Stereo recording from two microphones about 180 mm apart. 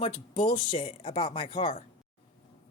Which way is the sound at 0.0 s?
35° left (ahead or behind).